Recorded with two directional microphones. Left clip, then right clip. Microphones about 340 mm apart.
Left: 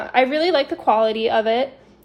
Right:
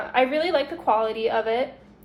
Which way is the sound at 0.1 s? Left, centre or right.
Left.